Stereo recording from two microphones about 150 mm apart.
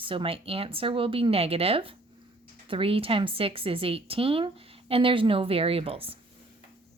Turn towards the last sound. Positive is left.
turn(degrees=-40)  # may be behind; listen again after turning